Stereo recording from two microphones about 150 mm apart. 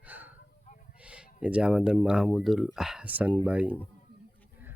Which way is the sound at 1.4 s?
5° right (ahead or behind).